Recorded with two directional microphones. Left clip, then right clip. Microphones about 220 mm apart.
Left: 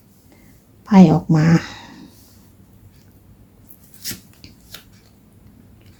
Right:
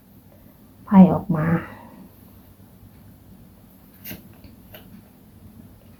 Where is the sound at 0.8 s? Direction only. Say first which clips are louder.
Left 3 dB; 60° left (ahead or behind).